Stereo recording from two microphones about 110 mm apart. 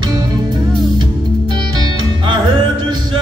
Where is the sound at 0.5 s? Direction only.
45° right (ahead or behind).